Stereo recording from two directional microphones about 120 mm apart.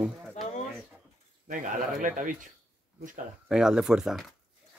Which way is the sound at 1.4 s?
90° right.